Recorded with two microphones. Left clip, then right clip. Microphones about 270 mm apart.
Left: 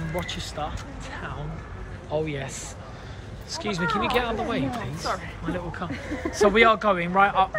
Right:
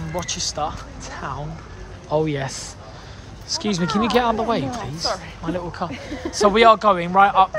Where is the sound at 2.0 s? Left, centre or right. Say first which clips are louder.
Right 7 dB; right.